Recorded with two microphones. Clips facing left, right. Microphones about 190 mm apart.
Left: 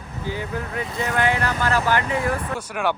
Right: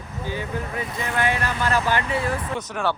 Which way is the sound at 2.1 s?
10° left (ahead or behind).